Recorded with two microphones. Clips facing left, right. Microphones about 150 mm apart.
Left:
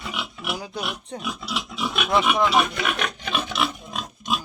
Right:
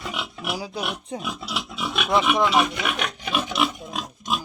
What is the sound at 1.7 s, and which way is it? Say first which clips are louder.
Pig: even; centre (ahead or behind).